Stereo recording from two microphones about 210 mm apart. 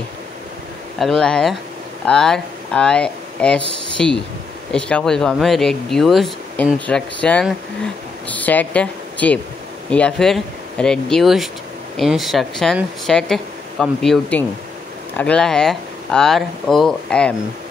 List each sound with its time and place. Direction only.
0.9 s speech: centre (ahead or behind)